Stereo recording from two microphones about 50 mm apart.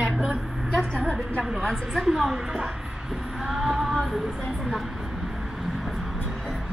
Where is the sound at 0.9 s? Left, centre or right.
Centre.